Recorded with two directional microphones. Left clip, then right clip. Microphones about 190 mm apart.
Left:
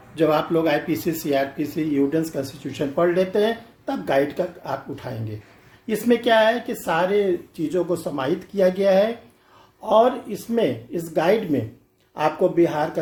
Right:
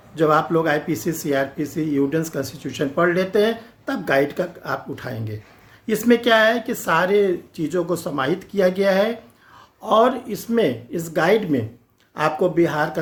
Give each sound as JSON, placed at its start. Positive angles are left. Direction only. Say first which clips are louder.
{"t": 0.2, "sound": "speech", "louder": "right 2 dB", "side_deg": -35}